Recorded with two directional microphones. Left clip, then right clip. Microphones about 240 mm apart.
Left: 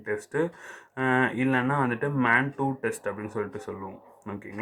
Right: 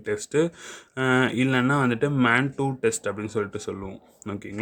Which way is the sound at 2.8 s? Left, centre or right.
Right.